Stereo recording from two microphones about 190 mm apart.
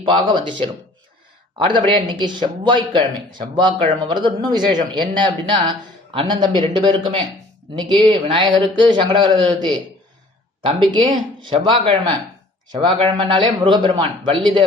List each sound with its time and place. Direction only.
0.3 s speech: 25° right (ahead or behind)